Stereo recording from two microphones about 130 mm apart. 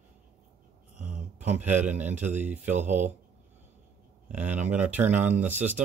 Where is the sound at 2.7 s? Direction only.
65° right (ahead or behind).